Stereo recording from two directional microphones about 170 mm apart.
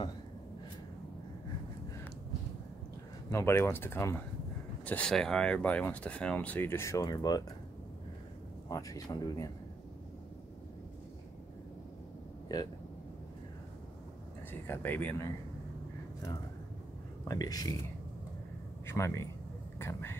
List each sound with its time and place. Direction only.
3.3 s speech: 15° left (ahead or behind)
8.6 s speech: 20° left (ahead or behind)
12.5 s speech: 25° left (ahead or behind)
14.7 s speech: 10° left (ahead or behind)
17.3 s speech: 20° left (ahead or behind)
18.9 s speech: 15° left (ahead or behind)